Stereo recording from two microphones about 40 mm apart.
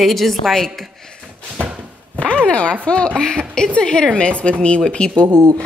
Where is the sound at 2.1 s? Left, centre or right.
Left.